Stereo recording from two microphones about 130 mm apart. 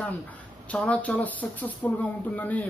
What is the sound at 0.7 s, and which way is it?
Speech, 10° left (ahead or behind).